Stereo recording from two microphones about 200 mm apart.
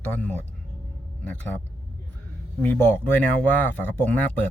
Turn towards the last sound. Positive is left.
turn(degrees=10)  # may be behind; listen again after turning